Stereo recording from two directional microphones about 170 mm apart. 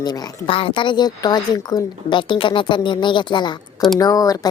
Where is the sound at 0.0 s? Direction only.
25° left (ahead or behind).